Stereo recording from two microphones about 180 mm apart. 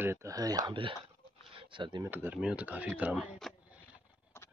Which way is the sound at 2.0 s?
10° right (ahead or behind).